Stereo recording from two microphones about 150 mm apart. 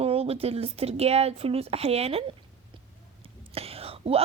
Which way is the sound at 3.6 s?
40° right (ahead or behind).